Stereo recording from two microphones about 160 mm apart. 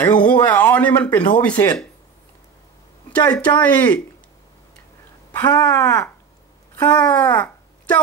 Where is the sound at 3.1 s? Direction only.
10° left (ahead or behind).